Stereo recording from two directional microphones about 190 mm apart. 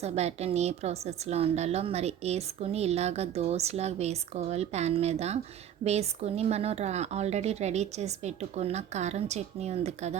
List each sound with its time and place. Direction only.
0.0 s a woman's voice: 35° right (ahead or behind)